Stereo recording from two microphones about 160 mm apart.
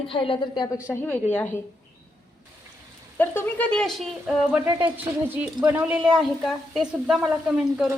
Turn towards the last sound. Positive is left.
turn(degrees=-5)  # may be behind; listen again after turning